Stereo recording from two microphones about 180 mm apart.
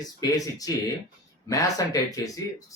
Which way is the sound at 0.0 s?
20° left (ahead or behind).